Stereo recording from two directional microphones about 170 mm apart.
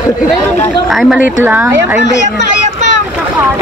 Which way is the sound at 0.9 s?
Centre (ahead or behind).